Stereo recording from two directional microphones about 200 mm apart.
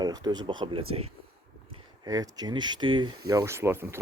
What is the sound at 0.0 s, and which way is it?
Speech, 20° right (ahead or behind).